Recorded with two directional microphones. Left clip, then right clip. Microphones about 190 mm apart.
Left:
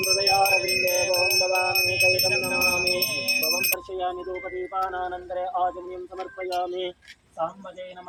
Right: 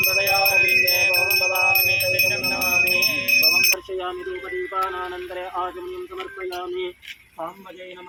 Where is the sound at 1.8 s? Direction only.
65° left (ahead or behind).